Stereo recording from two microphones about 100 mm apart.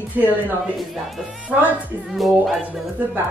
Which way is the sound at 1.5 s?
10° right (ahead or behind).